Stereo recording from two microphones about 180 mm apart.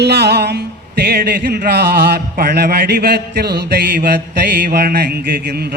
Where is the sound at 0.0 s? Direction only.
65° right (ahead or behind).